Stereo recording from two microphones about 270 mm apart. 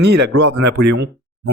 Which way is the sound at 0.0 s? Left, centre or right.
Right.